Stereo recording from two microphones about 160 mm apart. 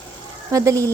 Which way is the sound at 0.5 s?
20° right (ahead or behind).